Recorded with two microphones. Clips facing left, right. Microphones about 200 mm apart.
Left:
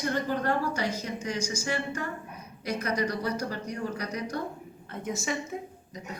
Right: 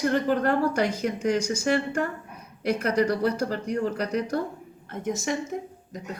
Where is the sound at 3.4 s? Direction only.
45° right (ahead or behind).